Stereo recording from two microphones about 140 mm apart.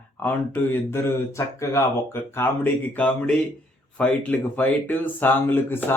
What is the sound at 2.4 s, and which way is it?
Speech, 15° left (ahead or behind).